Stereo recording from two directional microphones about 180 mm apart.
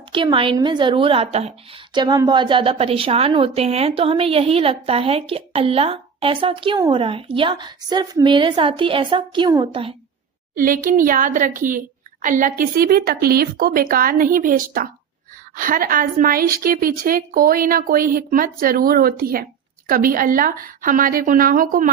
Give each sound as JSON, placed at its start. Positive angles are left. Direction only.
{"t": 0.1, "sound": "a woman's voice", "side_deg": -30}
{"t": 10.5, "sound": "a woman's voice", "side_deg": -50}